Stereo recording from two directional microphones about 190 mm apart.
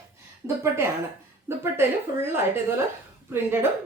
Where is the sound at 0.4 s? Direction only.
15° right (ahead or behind).